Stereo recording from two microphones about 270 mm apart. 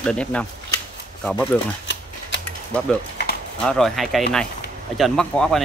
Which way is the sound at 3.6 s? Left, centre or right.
Centre.